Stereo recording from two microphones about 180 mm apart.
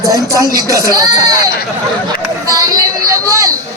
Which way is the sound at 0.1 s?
20° right (ahead or behind).